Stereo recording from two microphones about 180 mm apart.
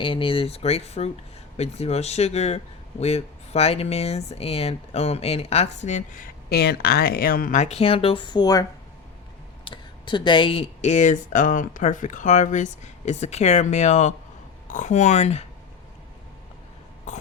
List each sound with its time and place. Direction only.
0.0 s speech: 30° left (ahead or behind)
9.6 s speech: 25° left (ahead or behind)
17.1 s cough: 40° left (ahead or behind)